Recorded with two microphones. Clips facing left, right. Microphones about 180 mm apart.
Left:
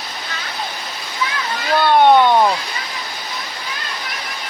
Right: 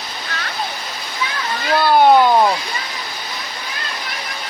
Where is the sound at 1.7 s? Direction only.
5° right (ahead or behind).